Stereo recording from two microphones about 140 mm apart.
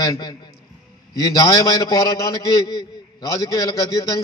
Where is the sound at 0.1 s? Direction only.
30° left (ahead or behind).